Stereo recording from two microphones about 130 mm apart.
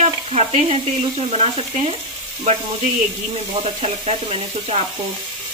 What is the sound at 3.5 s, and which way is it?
Speech, 50° right (ahead or behind).